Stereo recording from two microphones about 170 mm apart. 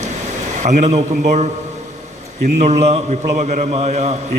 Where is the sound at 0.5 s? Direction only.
45° right (ahead or behind).